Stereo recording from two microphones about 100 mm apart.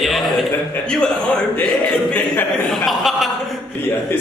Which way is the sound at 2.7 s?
Centre (ahead or behind).